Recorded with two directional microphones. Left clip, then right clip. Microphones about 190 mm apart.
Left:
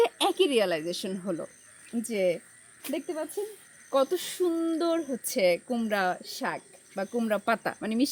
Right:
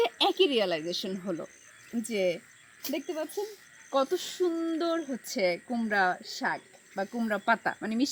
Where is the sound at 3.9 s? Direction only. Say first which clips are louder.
Left 2 dB; 30° left (ahead or behind).